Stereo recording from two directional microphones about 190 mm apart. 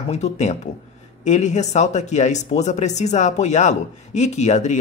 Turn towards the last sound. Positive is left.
turn(degrees=35)  # may be behind; listen again after turning